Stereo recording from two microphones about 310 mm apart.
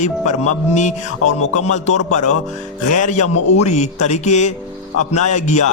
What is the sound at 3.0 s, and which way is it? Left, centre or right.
A man's voice, left.